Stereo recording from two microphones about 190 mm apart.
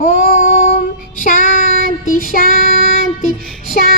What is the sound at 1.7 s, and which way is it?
Child singing, 50° right (ahead or behind).